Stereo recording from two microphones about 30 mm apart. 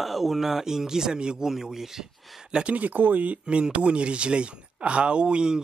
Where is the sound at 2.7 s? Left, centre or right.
Right.